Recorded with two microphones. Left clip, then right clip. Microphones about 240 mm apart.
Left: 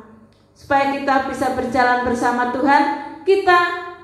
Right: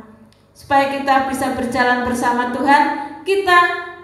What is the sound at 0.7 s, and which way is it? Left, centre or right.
A woman's voice, right.